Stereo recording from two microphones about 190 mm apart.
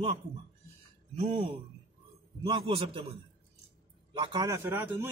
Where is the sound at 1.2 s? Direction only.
25° right (ahead or behind).